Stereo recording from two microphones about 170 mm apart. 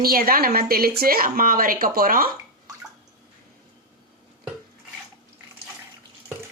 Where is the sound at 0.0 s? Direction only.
60° right (ahead or behind).